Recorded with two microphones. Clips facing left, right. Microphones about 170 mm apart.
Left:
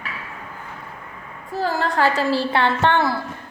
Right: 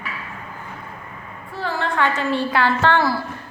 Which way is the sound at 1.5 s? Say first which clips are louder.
Left 2 dB; 40° left (ahead or behind).